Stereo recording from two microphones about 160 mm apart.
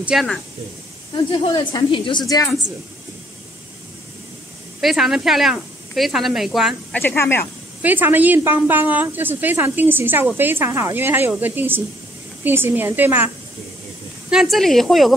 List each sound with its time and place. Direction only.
0.0 s speech: centre (ahead or behind)
1.1 s a woman's voice: 30° left (ahead or behind)
4.7 s speech: centre (ahead or behind)
6.9 s speech: 10° left (ahead or behind)
7.8 s a woman's voice: 10° right (ahead or behind)
14.3 s speech: centre (ahead or behind)